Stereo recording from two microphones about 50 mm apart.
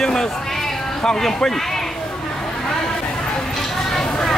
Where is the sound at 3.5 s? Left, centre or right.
Centre.